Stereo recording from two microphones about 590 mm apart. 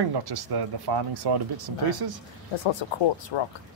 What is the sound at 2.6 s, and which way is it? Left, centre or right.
Speech, left.